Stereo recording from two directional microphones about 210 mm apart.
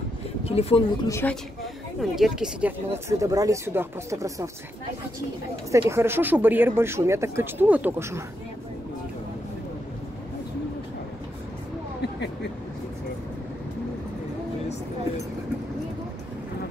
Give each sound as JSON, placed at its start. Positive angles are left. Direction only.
{"t": 0.4, "sound": "speech", "side_deg": 30}
{"t": 1.0, "sound": "a woman's voice", "side_deg": 15}
{"t": 2.0, "sound": "speech", "side_deg": 0}
{"t": 5.7, "sound": "speech", "side_deg": -10}